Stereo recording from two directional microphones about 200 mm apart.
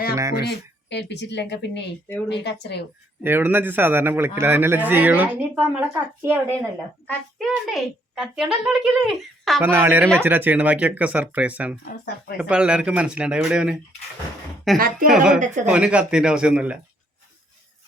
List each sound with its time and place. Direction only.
0.3 s speech: 55° left (ahead or behind)
3.2 s a man's voice: 10° right (ahead or behind)
9.6 s a man's voice: 10° right (ahead or behind)
14.8 s a woman's voice: 45° right (ahead or behind)
15.1 s a child's voice: 5° right (ahead or behind)
15.4 s speech: 40° right (ahead or behind)
15.7 s a child's voice: 5° right (ahead or behind)